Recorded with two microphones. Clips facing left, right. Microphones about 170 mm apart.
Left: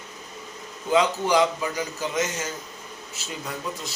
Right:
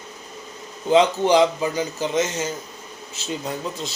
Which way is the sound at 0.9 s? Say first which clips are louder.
Right 5 dB; 25° right (ahead or behind).